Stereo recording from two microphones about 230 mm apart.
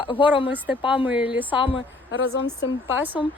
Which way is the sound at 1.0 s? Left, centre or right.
Centre.